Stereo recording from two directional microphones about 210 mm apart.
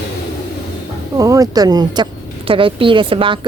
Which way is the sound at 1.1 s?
15° right (ahead or behind).